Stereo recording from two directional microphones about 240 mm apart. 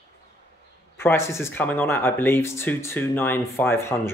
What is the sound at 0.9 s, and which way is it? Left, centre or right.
Speech, centre.